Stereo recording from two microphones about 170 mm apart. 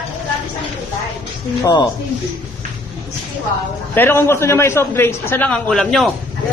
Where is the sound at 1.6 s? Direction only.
20° left (ahead or behind).